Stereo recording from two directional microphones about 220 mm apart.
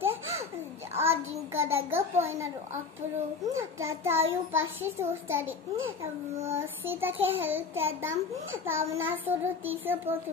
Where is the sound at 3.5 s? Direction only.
10° right (ahead or behind).